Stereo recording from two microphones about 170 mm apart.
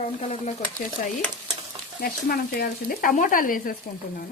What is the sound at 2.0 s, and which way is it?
Speech, 60° left (ahead or behind).